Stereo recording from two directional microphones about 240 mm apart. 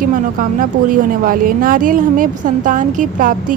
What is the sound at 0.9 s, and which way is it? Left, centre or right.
A woman's voice, right.